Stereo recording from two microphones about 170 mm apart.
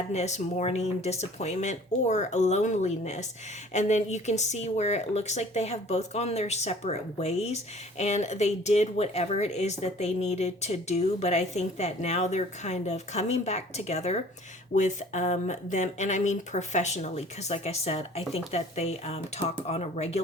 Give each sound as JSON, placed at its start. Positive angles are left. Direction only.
{"t": 0.1, "sound": "speech", "side_deg": 40}